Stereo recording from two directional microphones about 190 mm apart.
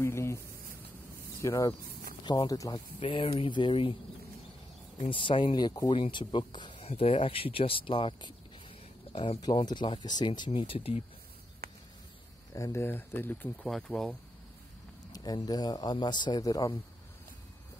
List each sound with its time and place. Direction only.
0.0 s a sound: 15° left (ahead or behind)
1.4 s speech: 15° left (ahead or behind)
5.1 s speech: 25° left (ahead or behind)
11.6 s a sound: 55° right (ahead or behind)
12.5 s speech: 15° left (ahead or behind)
15.1 s speech: 20° left (ahead or behind)